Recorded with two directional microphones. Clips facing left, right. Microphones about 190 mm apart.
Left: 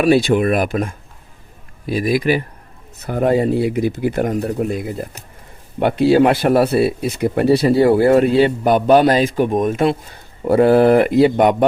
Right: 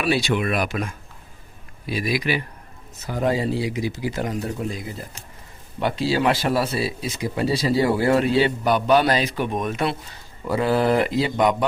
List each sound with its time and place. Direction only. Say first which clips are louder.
0.0 s speech: left 8 dB; 50° left (ahead or behind)
1.9 s speech: left 7 dB; 50° left (ahead or behind)